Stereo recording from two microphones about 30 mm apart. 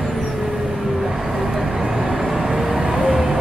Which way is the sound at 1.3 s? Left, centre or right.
Centre.